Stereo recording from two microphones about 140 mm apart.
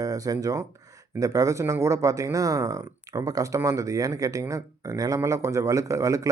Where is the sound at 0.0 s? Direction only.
25° right (ahead or behind).